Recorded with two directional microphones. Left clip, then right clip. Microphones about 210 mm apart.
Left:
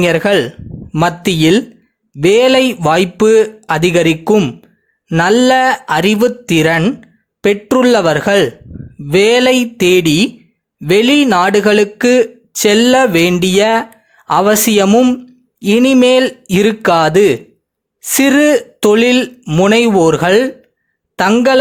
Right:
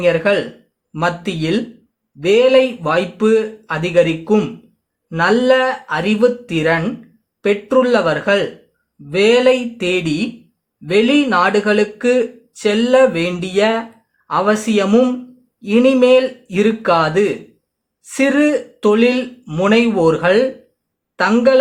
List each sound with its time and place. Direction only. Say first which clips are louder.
0.0 s speech: left 3 dB; 50° left (ahead or behind)